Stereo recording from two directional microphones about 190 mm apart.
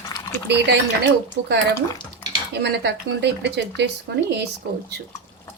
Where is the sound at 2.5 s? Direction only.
60° right (ahead or behind).